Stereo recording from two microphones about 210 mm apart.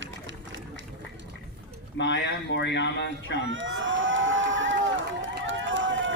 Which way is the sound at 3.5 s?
65° right (ahead or behind).